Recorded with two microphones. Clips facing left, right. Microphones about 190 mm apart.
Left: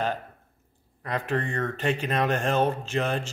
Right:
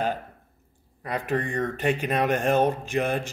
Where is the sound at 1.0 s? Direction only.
15° right (ahead or behind).